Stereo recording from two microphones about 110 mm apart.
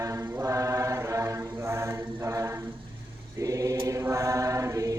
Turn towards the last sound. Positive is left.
turn(degrees=-30)  # may be behind; listen again after turning